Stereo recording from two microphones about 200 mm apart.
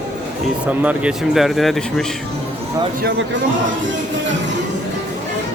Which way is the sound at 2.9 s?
55° right (ahead or behind).